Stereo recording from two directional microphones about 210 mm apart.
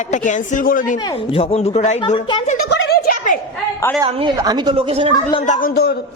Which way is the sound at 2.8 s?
50° left (ahead or behind).